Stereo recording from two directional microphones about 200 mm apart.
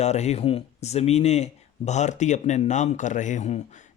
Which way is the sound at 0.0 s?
35° left (ahead or behind).